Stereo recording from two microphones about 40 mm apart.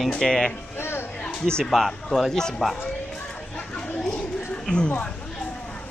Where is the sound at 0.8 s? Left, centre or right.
Left.